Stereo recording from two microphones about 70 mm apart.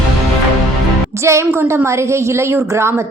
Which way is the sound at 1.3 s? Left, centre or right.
Right.